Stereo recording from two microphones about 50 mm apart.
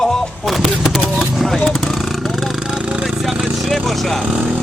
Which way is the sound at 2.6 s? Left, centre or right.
Centre.